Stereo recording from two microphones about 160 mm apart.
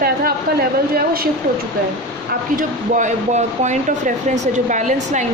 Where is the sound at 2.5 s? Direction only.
50° right (ahead or behind).